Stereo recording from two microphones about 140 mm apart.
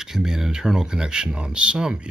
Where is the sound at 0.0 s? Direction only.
5° right (ahead or behind).